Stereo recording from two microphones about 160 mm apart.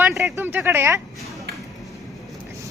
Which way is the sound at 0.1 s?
Centre (ahead or behind).